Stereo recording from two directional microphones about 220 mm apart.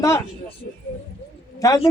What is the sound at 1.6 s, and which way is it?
Speech, 15° left (ahead or behind).